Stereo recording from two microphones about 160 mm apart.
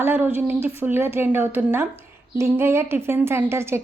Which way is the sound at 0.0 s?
10° right (ahead or behind).